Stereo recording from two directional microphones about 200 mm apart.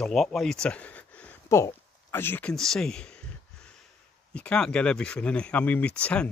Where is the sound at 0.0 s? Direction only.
Centre (ahead or behind).